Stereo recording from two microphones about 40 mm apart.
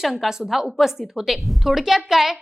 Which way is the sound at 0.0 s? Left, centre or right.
Centre.